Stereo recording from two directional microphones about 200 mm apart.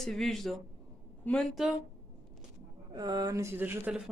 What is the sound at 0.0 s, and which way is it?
Speech, centre (ahead or behind).